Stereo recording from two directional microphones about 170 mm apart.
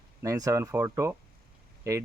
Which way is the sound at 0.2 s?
20° right (ahead or behind).